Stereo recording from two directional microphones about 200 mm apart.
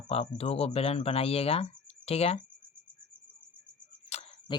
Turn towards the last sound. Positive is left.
turn(degrees=30)  # may be behind; listen again after turning